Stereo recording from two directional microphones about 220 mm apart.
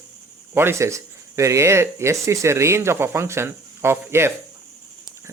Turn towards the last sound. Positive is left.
turn(degrees=-10)  # may be behind; listen again after turning